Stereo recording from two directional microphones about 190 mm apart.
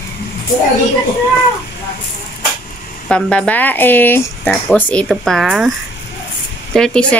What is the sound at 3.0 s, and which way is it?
Speech, 5° left (ahead or behind).